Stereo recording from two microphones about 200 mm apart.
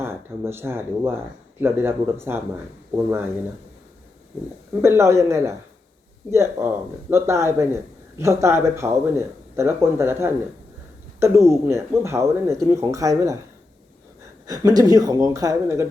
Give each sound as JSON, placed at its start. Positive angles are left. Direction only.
{"t": 0.0, "sound": "speech", "side_deg": -10}
{"t": 4.7, "sound": "speech", "side_deg": -10}
{"t": 14.4, "sound": "speech", "side_deg": -15}